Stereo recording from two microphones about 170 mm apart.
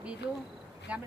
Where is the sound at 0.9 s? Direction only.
10° right (ahead or behind).